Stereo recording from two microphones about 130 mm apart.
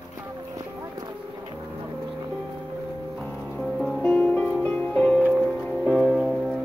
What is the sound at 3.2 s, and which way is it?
Music, 5° left (ahead or behind).